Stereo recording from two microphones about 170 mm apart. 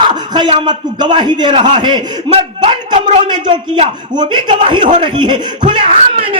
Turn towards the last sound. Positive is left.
turn(degrees=-30)  # may be behind; listen again after turning